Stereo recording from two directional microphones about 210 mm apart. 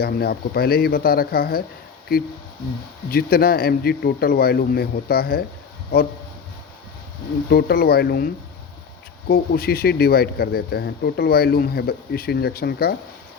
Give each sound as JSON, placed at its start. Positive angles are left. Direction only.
{"t": 0.0, "sound": "speech", "side_deg": 45}
{"t": 3.1, "sound": "speech", "side_deg": 45}
{"t": 7.5, "sound": "speech", "side_deg": 45}
{"t": 9.3, "sound": "speech", "side_deg": 45}